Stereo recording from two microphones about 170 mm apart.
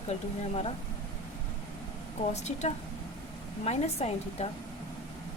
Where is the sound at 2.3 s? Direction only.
40° left (ahead or behind).